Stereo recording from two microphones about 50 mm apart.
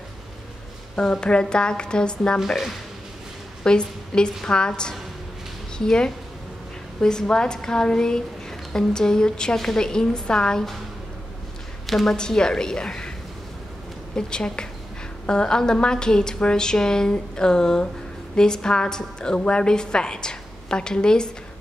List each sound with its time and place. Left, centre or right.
0.9 s a woman's voice: centre
2.4 s speech: centre
3.6 s a woman's voice: centre
11.8 s a woman's voice: centre
12.2 s a woman's voice: centre
14.1 s a woman's voice: centre